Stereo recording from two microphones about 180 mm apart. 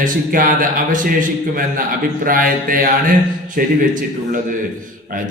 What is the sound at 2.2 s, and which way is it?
Mantra, 50° right (ahead or behind).